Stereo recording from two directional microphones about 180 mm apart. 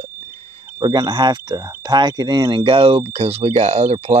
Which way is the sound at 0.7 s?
20° right (ahead or behind).